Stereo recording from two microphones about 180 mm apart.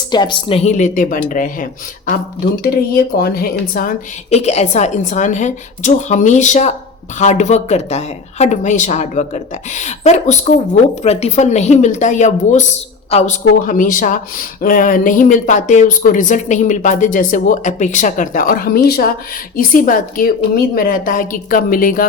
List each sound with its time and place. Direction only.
0.1 s a woman's voice: 25° left (ahead or behind); by 1.6 s 45° left (ahead or behind)
2.9 s speech: 55° left (ahead or behind)
4.3 s a woman's voice: 35° left (ahead or behind); by 22.0 s 50° left (ahead or behind)